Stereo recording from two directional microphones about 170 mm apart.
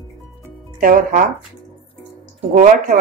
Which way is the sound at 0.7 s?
55° right (ahead or behind).